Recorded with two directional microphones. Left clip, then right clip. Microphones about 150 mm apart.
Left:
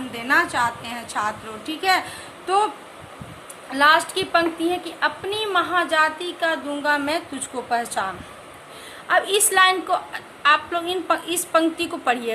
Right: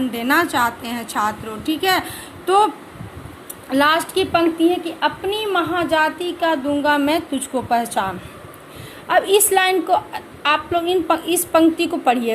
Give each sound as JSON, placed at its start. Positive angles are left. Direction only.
{"t": 0.1, "sound": "a woman's voice", "side_deg": -50}
{"t": 3.7, "sound": "a woman's voice", "side_deg": -45}